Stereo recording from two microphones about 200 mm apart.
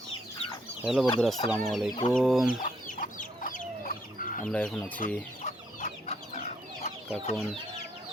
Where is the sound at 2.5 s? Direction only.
40° left (ahead or behind).